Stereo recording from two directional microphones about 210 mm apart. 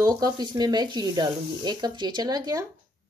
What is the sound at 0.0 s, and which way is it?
Speech, 15° right (ahead or behind).